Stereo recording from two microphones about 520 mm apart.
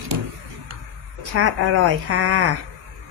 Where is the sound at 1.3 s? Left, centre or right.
Right.